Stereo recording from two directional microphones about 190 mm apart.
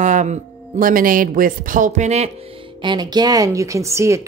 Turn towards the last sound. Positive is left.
turn(degrees=-15)  # may be behind; listen again after turning